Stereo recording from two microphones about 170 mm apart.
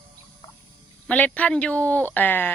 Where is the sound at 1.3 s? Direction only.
5° left (ahead or behind).